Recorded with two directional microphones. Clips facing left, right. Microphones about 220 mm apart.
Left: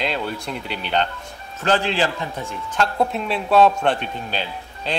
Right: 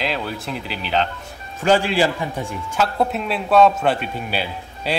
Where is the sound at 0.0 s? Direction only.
5° right (ahead or behind).